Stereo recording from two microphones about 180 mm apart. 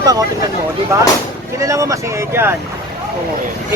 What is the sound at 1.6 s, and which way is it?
Speech, 15° right (ahead or behind).